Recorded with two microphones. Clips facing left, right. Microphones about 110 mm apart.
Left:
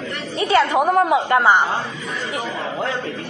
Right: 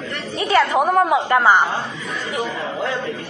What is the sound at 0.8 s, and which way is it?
Speech, 20° right (ahead or behind).